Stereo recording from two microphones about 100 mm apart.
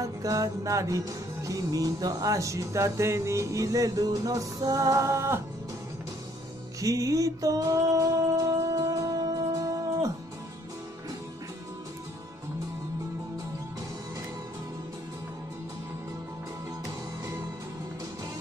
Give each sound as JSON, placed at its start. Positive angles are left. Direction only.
{"t": 0.0, "sound": "music", "side_deg": -35}
{"t": 6.8, "sound": "music", "side_deg": -35}
{"t": 16.8, "sound": "music", "side_deg": -35}